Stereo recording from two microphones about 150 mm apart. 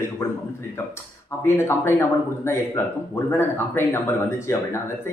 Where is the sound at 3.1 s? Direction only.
15° left (ahead or behind).